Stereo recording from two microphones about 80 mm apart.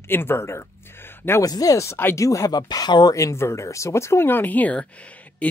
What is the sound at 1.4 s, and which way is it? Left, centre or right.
Speech, left.